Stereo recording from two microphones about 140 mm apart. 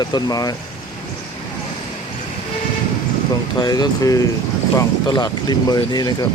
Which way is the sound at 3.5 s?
30° left (ahead or behind).